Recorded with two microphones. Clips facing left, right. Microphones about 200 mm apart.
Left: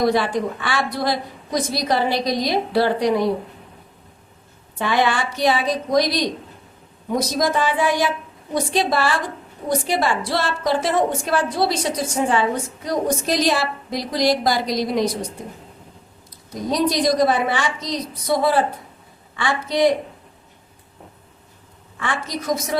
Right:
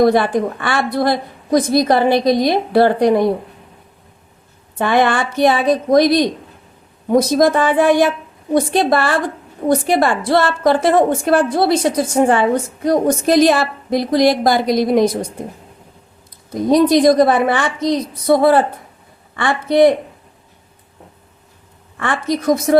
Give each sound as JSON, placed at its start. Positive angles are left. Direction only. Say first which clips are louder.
{"t": 0.0, "sound": "a woman's voice", "louder": "right 6 dB", "side_deg": -55}
{"t": 4.8, "sound": "a woman's voice", "louder": "right 5 dB", "side_deg": -55}
{"t": 16.5, "sound": "a woman's voice", "louder": "right 9 dB", "side_deg": -55}
{"t": 21.9, "sound": "a woman's voice", "louder": "right 7 dB", "side_deg": -55}